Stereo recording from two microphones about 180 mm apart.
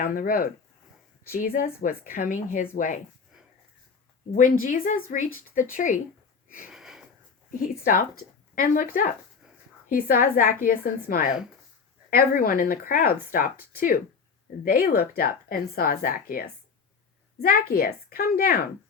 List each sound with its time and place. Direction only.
0.0 s a woman's voice: 50° left (ahead or behind)
4.4 s a woman's voice: 45° left (ahead or behind)
6.7 s wheeze: 5° right (ahead or behind)
7.6 s a woman's voice: 50° left (ahead or behind)